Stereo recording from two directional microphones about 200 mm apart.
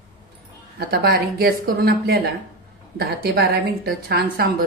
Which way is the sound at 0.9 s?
50° right (ahead or behind).